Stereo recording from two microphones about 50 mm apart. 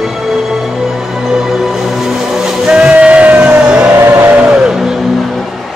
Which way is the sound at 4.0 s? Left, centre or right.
Right.